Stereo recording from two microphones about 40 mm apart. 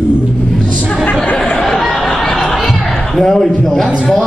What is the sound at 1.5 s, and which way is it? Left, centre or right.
Chatter, centre.